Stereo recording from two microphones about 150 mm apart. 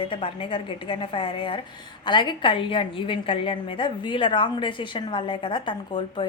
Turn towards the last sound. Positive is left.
turn(degrees=30)  # may be behind; listen again after turning